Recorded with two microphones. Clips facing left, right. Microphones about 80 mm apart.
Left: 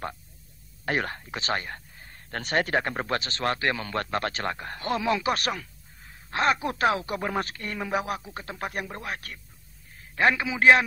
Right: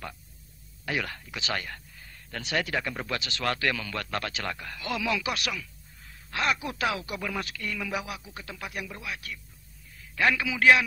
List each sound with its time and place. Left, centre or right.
0.8 s speech: left
9.9 s a man's voice: left